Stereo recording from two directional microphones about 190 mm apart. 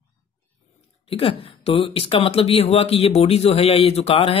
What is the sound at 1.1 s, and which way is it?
Speech, 30° left (ahead or behind).